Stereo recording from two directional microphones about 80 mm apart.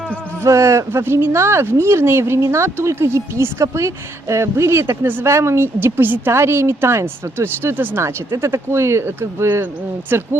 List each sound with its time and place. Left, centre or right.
0.4 s speech: right